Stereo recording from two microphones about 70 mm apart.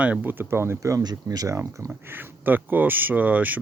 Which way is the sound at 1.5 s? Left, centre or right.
Right.